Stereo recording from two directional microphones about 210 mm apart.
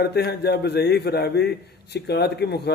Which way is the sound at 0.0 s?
50° left (ahead or behind).